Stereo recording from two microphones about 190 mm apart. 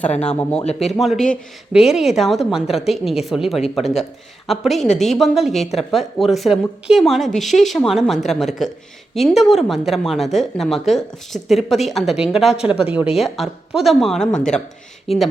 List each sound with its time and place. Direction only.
0.2 s speech: 5° left (ahead or behind)
0.6 s speech: 35° left (ahead or behind)
0.9 s speech: centre (ahead or behind)